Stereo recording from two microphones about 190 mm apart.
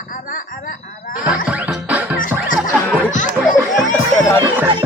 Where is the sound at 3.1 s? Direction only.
40° left (ahead or behind).